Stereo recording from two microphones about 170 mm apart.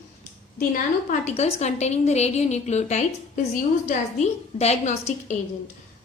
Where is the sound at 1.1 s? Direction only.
40° left (ahead or behind).